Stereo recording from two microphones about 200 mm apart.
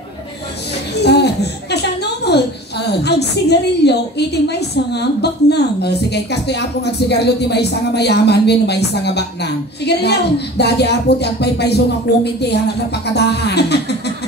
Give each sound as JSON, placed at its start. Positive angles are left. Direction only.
{"t": 0.9, "sound": "a woman's voice", "side_deg": 55}